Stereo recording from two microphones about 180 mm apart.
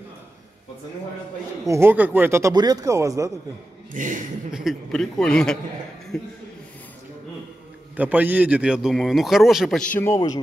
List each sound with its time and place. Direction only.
1.7 s a man's voice: 10° right (ahead or behind)
3.9 s a man's voice: 45° right (ahead or behind)
4.5 s a man's voice: 5° right (ahead or behind)
7.9 s a man's voice: 10° right (ahead or behind)
9.9 s speech: 15° left (ahead or behind)